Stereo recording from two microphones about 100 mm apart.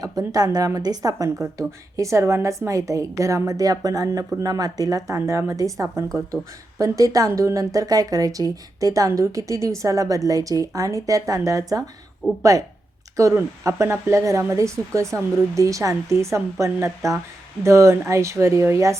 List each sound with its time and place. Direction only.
0.0 s speech: 35° right (ahead or behind)